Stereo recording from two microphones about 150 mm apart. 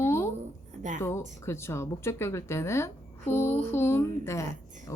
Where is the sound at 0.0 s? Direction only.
15° left (ahead or behind).